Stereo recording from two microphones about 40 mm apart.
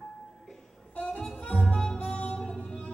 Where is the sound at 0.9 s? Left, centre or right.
Left.